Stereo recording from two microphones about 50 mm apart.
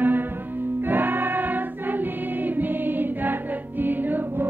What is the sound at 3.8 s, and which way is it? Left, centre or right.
Music, right.